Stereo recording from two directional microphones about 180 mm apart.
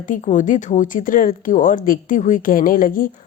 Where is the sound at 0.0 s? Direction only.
45° left (ahead or behind).